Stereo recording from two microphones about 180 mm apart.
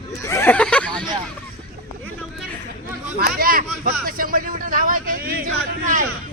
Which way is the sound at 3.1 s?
55° right (ahead or behind).